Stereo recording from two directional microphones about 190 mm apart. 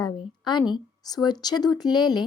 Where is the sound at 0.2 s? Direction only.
25° left (ahead or behind).